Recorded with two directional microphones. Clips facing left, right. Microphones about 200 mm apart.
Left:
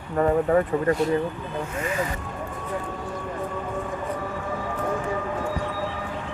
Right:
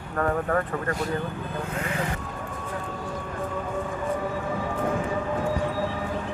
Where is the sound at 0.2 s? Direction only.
15° left (ahead or behind).